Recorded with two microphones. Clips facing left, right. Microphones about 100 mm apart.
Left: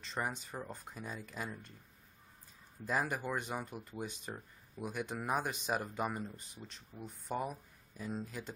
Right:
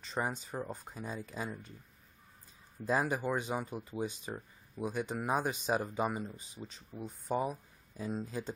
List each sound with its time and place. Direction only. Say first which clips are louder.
0.0 s speech: right 3 dB; 10° right (ahead or behind)
2.9 s speech: right 4 dB; 15° right (ahead or behind)
6.6 s speech: right 6 dB; 20° right (ahead or behind)
7.2 s speech: right 5 dB; 5° right (ahead or behind)
8.0 s speech: right 4 dB; 20° right (ahead or behind)